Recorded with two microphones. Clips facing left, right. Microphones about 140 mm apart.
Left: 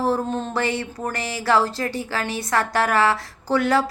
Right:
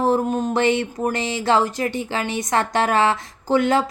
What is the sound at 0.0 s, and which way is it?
Speech, 15° right (ahead or behind).